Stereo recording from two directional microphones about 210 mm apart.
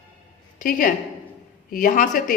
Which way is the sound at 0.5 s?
40° left (ahead or behind).